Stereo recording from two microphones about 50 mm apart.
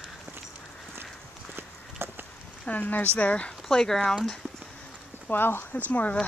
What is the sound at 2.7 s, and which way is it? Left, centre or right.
Speech, left.